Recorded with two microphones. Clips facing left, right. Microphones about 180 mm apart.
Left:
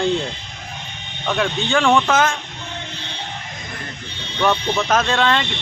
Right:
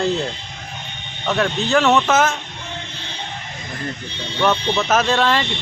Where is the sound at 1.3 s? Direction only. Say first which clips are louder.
Right 2 dB; centre (ahead or behind).